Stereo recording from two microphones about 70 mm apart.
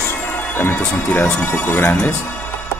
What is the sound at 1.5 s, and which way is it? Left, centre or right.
Speech, left.